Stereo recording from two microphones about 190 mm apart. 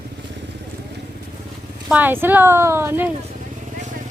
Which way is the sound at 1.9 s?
10° right (ahead or behind).